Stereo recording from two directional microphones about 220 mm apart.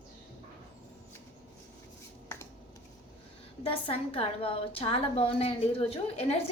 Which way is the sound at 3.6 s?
25° left (ahead or behind).